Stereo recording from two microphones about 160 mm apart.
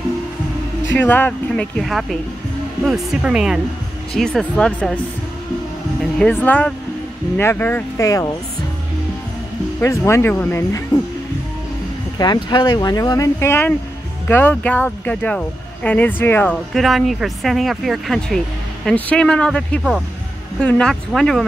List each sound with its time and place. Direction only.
0.9 s speech: 10° left (ahead or behind)
6.1 s speech: 10° left (ahead or behind)
9.8 s speech: 15° left (ahead or behind)
12.2 s speech: 25° left (ahead or behind); by 21.5 s centre (ahead or behind)